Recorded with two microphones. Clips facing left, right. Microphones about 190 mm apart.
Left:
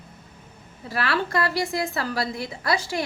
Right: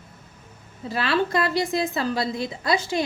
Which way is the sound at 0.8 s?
20° right (ahead or behind).